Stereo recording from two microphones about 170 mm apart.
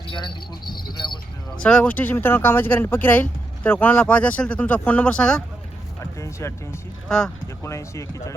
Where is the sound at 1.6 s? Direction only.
5° left (ahead or behind).